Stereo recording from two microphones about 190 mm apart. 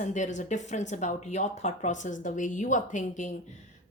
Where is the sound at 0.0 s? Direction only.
40° left (ahead or behind).